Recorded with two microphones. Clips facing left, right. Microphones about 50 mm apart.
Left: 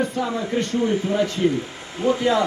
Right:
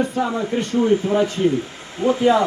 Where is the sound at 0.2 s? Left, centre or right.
Right.